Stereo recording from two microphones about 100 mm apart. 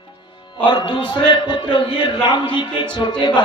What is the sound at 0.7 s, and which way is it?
A man's voice, 55° left (ahead or behind).